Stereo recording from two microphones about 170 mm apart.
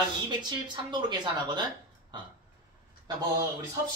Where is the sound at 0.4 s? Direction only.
25° right (ahead or behind).